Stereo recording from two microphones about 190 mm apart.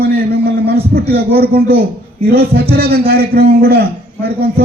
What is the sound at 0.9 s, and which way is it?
A man's voice, 55° right (ahead or behind).